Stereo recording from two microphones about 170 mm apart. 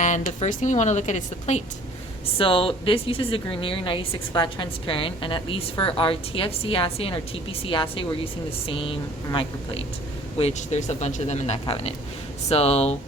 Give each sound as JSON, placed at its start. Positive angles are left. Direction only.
{"t": 0.0, "sound": "speech", "side_deg": 45}